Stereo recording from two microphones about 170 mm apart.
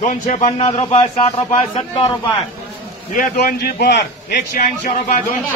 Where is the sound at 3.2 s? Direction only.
65° left (ahead or behind).